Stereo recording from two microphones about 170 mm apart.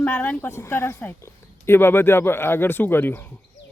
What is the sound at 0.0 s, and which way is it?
Speech, 10° left (ahead or behind).